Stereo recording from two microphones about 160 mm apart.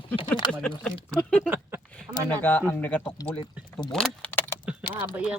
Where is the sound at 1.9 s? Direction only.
10° left (ahead or behind).